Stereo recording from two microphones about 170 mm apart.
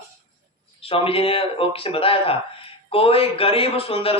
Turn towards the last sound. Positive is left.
turn(degrees=35)  # may be behind; listen again after turning